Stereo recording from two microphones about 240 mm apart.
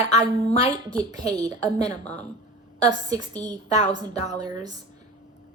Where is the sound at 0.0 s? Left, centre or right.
Centre.